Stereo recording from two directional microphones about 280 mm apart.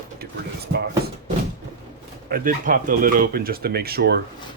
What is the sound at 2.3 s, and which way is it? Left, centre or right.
Speech, right.